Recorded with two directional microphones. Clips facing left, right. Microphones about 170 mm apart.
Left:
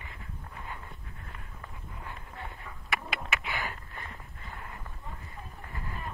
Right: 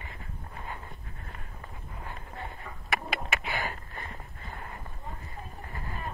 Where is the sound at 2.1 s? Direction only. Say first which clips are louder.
Right 2 dB; 35° right (ahead or behind).